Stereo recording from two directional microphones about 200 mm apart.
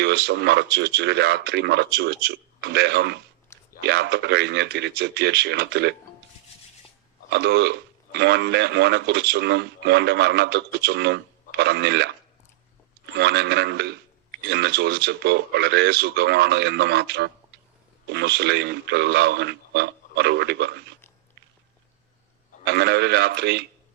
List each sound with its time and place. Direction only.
0.0 s speech: 55° right (ahead or behind)
7.3 s speech: 55° right (ahead or behind)
13.1 s speech: 55° right (ahead or behind)
22.6 s speech: 55° right (ahead or behind)